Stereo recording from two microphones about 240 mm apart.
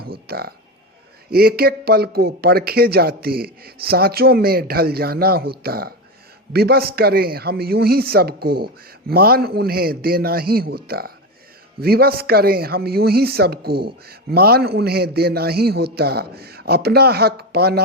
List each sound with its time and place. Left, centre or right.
0.0 s speech: right